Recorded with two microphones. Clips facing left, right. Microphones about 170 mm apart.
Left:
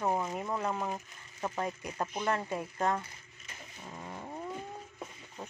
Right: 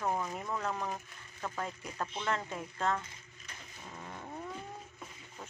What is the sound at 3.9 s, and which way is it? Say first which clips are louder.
Cattle: left 3 dB; 10° left (ahead or behind).